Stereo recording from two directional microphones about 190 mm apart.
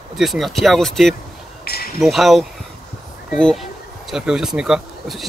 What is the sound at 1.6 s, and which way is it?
Basketball bounce, 55° left (ahead or behind).